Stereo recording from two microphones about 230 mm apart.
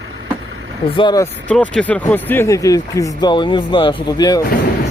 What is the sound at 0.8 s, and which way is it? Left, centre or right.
Speech, left.